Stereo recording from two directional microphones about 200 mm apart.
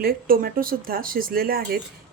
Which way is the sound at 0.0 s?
50° right (ahead or behind).